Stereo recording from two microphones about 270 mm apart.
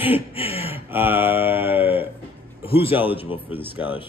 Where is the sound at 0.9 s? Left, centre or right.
Centre.